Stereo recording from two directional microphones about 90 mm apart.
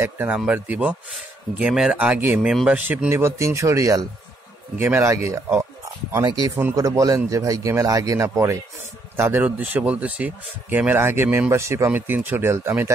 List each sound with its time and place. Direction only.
0.0 s speech: 20° right (ahead or behind)
3.2 s a man's voice: 35° right (ahead or behind)
6.2 s a man's voice: 50° right (ahead or behind); by 11.5 s 20° right (ahead or behind)
11.5 s a man's voice: 30° right (ahead or behind)
11.9 s speech: 20° right (ahead or behind)